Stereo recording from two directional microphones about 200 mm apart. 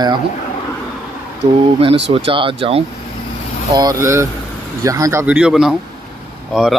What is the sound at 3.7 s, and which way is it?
Speech, 20° right (ahead or behind).